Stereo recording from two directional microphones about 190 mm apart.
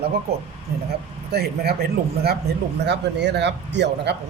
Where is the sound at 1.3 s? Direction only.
55° right (ahead or behind).